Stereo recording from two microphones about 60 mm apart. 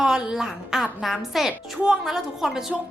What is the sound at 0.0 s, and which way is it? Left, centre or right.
A woman's voice, centre.